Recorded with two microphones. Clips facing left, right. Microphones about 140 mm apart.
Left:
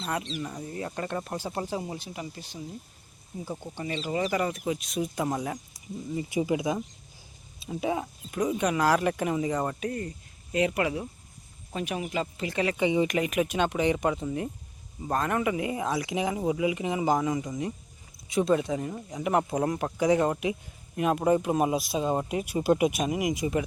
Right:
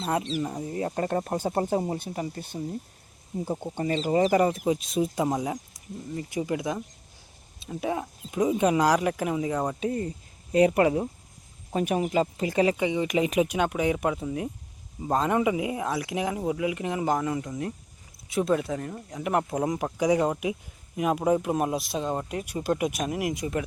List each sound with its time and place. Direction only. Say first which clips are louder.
0.8 s speech: right 6 dB; 35° right (ahead or behind)
3.8 s speech: right 6 dB; 40° right (ahead or behind); by 5.5 s 15° right (ahead or behind)
6.1 s speech: left 2 dB; 10° left (ahead or behind)
8.3 s speech: right 4 dB; 20° right (ahead or behind)
8.8 s speech: right 1 dB; 10° right (ahead or behind)
9.8 s speech: right 4 dB; 20° right (ahead or behind)
10.5 s speech: right 6 dB; 35° right (ahead or behind)
12.8 s speech: left 2 dB; centre (ahead or behind)
13.1 s speech: right 3 dB; 20° right (ahead or behind)
13.5 s speech: even; 5° right (ahead or behind)
15.0 s speech: right 3 dB; 20° right (ahead or behind); by 19.7 s centre (ahead or behind)
19.7 s speech: right 1 dB; 10° right (ahead or behind)